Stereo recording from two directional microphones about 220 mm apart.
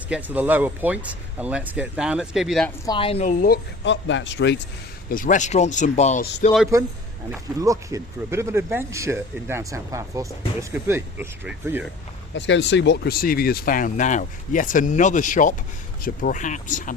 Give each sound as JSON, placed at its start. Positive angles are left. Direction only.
{"t": 0.1, "sound": "speech", "side_deg": -5}
{"t": 2.8, "sound": "a woman's voice", "side_deg": 20}
{"t": 3.4, "sound": "speech", "side_deg": 50}
{"t": 5.1, "sound": "speech", "side_deg": 35}
{"t": 7.3, "sound": "speech", "side_deg": -15}
{"t": 12.3, "sound": "speech", "side_deg": 55}